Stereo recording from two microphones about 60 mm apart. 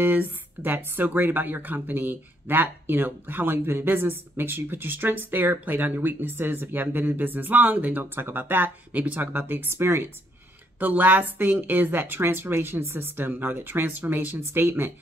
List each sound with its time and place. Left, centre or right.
0.0 s speech: right
10.8 s speech: right